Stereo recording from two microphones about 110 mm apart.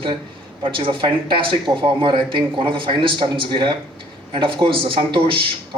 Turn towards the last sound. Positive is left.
turn(degrees=-55)  # may be behind; listen again after turning